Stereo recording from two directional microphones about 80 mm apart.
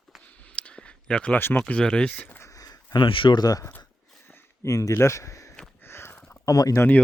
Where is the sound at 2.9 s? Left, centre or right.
Left.